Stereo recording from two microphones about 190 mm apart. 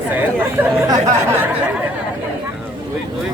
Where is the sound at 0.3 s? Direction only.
15° right (ahead or behind).